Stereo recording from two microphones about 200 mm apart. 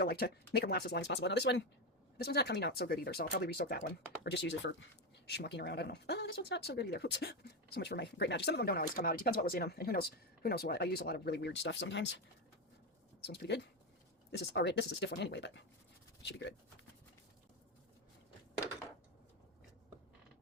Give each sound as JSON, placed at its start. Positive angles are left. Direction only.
{"t": 0.0, "sound": "speech", "side_deg": 50}
{"t": 13.2, "sound": "speech", "side_deg": 55}